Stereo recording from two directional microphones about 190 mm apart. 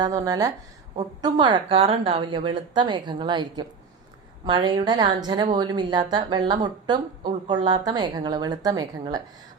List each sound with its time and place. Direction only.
0.0 s speech: 20° right (ahead or behind)